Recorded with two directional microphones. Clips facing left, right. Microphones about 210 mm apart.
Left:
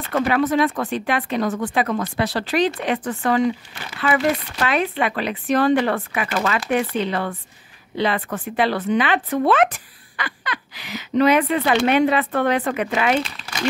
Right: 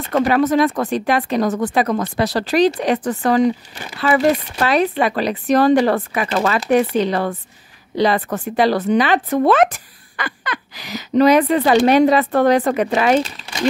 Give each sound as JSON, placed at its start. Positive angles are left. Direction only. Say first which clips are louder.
{"t": 0.1, "sound": "a woman's voice", "louder": "right 4 dB", "side_deg": -40}